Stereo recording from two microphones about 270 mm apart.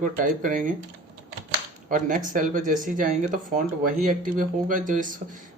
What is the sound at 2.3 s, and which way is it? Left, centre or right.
Speech, right.